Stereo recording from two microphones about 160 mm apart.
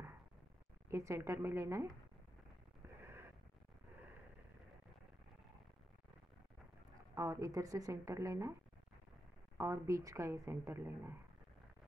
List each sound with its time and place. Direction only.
0.8 s speech: 15° right (ahead or behind)
3.0 s a sound: 15° right (ahead or behind)
7.2 s a woman's voice: 20° right (ahead or behind)
9.6 s speech: 20° right (ahead or behind)